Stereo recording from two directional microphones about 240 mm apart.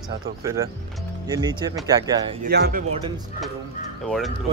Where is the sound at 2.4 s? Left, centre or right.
Right.